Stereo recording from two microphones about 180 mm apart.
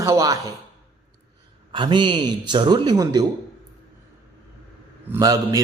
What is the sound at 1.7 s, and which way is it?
Speech, 25° right (ahead or behind).